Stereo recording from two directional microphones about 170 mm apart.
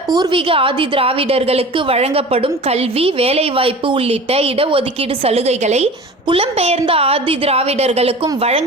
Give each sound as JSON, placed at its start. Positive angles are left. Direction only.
{"t": 0.1, "sound": "a woman's voice", "side_deg": -25}